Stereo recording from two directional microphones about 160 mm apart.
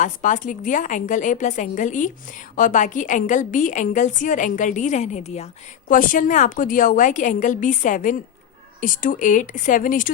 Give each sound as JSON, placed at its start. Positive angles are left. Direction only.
{"t": 0.0, "sound": "a woman's voice", "side_deg": 50}
{"t": 5.9, "sound": "a woman's voice", "side_deg": 60}